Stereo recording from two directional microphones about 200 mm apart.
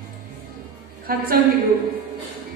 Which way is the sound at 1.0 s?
50° right (ahead or behind).